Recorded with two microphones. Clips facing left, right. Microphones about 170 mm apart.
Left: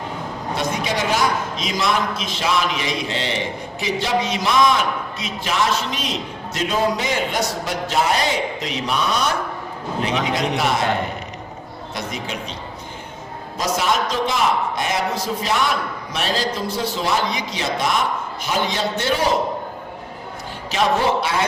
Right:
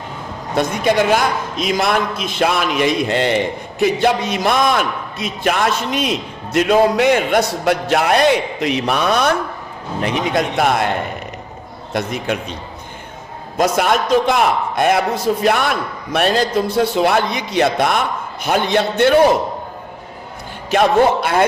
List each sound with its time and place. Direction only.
0.5 s a man's voice: 55° right (ahead or behind)
11.9 s a man's voice: 55° right (ahead or behind)
13.6 s a man's voice: 55° right (ahead or behind)
20.7 s a man's voice: 55° right (ahead or behind)